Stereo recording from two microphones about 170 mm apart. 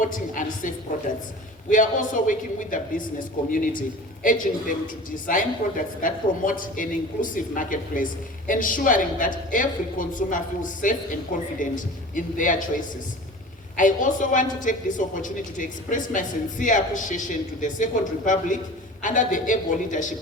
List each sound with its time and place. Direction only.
0.0 s speech: 50° left (ahead or behind)
13.7 s speech: 50° left (ahead or behind)
19.0 s speech: 50° left (ahead or behind)